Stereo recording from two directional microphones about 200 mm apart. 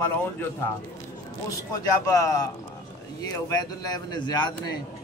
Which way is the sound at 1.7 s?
15° left (ahead or behind).